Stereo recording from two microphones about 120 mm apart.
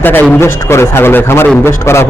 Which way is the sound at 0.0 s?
15° left (ahead or behind).